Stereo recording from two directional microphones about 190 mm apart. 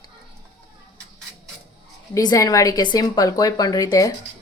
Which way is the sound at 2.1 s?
20° left (ahead or behind).